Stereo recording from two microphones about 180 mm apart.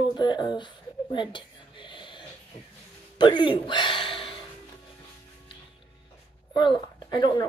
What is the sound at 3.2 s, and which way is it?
Speech, 25° left (ahead or behind).